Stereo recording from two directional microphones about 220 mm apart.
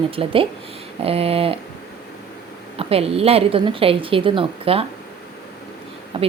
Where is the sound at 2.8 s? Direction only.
25° right (ahead or behind).